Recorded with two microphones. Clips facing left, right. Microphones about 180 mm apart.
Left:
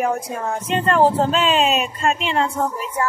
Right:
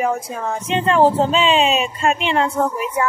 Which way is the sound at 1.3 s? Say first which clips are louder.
Right 2 dB; 45° left (ahead or behind).